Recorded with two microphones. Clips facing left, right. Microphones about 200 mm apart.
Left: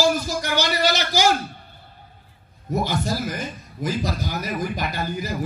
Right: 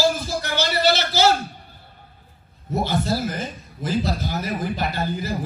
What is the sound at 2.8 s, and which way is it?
A man's voice, 15° left (ahead or behind).